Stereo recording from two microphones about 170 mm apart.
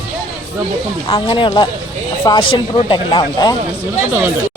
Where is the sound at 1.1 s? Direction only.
30° left (ahead or behind).